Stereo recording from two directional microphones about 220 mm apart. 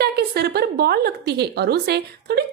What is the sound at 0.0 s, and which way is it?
A woman's voice, 45° right (ahead or behind).